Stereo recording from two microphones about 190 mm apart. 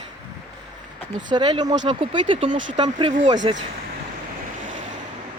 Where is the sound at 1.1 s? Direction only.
25° right (ahead or behind).